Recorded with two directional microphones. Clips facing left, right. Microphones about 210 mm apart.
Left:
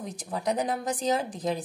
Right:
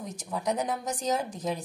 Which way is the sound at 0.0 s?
35° left (ahead or behind).